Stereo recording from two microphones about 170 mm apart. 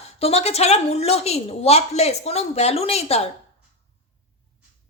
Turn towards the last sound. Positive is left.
turn(degrees=35)  # may be behind; listen again after turning